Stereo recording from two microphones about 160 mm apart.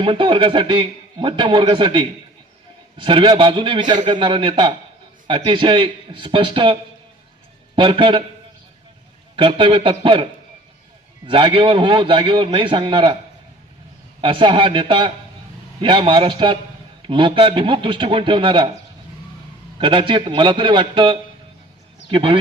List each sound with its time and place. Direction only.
0.0 s a man's voice: 30° right (ahead or behind)
7.8 s a man's voice: 30° right (ahead or behind)
9.3 s a man's voice: 30° right (ahead or behind)
11.3 s a man's voice: 30° right (ahead or behind)
14.2 s a man's voice: 30° right (ahead or behind)
19.8 s a man's voice: 30° right (ahead or behind)